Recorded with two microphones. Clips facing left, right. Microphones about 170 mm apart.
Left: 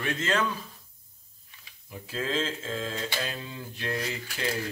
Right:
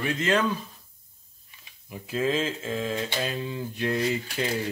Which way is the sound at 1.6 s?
15° right (ahead or behind).